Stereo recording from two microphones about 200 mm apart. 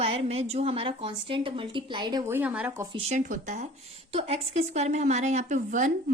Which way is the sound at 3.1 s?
40° right (ahead or behind).